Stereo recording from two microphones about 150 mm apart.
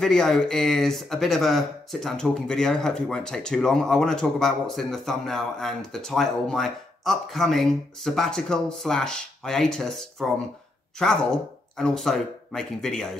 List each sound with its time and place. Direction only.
0.0 s speech: 5° left (ahead or behind)